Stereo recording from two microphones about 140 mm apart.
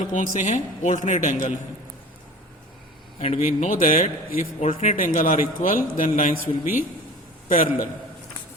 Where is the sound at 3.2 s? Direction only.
55° left (ahead or behind); by 4.0 s 75° left (ahead or behind).